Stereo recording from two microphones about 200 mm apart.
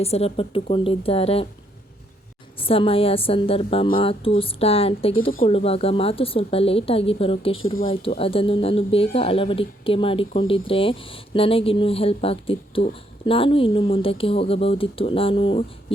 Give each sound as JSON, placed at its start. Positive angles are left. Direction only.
{"t": 0.0, "sound": "speech", "side_deg": 30}
{"t": 2.6, "sound": "speech", "side_deg": 30}